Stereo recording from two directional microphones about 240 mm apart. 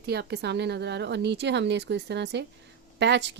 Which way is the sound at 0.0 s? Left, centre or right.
Right.